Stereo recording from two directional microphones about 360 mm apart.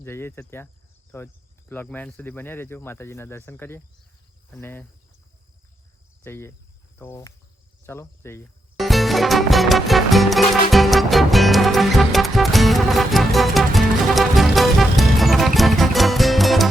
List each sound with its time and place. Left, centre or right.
0.0 s speech: centre
6.2 s speech: centre
7.9 s music: centre